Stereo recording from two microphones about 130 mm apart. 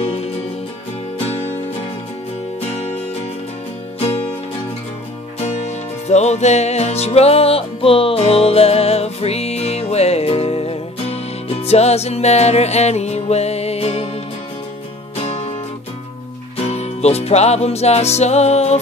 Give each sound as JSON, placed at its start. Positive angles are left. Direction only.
{"t": 0.0, "sound": "music", "side_deg": 50}
{"t": 2.6, "sound": "music", "side_deg": 55}
{"t": 5.4, "sound": "music", "side_deg": 60}
{"t": 15.1, "sound": "music", "side_deg": 55}
{"t": 16.5, "sound": "music", "side_deg": 55}